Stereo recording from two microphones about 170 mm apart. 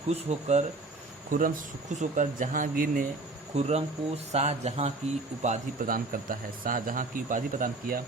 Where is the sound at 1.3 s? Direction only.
55° right (ahead or behind).